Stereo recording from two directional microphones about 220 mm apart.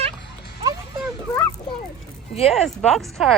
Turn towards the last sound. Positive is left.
turn(degrees=0)  # may be behind; listen again after turning